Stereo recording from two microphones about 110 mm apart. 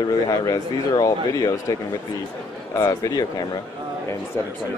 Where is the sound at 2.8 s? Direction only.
35° left (ahead or behind).